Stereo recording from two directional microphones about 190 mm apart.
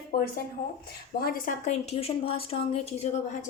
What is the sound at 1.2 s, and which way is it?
A woman's voice, 40° left (ahead or behind).